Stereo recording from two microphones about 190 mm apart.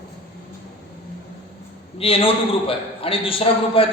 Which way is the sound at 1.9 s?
30° left (ahead or behind).